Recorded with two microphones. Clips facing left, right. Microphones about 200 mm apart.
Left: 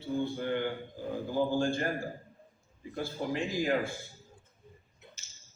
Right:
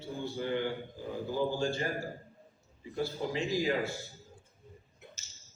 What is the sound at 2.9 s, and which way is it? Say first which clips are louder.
Speech: even; 50° left (ahead or behind).